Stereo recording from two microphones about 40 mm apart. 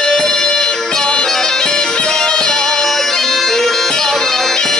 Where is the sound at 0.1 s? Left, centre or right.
Centre.